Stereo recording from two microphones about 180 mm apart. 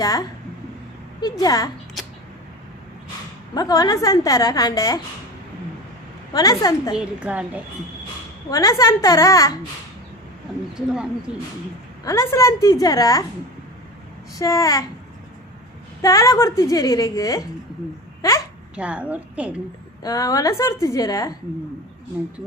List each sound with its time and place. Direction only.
0.0 s a woman's voice: 20° left (ahead or behind)
3.5 s a woman's voice: 20° left (ahead or behind)
6.3 s a woman's voice: 20° left (ahead or behind)
6.9 s a woman's voice: 10° right (ahead or behind)
8.4 s a woman's voice: 20° left (ahead or behind)
10.5 s speech: centre (ahead or behind)
12.0 s a woman's voice: 15° left (ahead or behind)
14.3 s a woman's voice: 20° left (ahead or behind)
16.0 s a woman's voice: 20° left (ahead or behind)
18.8 s a woman's voice: 5° right (ahead or behind)
20.0 s a woman's voice: 20° left (ahead or behind)